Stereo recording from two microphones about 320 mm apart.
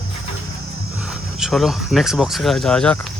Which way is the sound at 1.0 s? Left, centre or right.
Centre.